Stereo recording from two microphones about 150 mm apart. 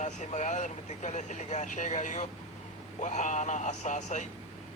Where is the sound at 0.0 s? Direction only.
55° left (ahead or behind).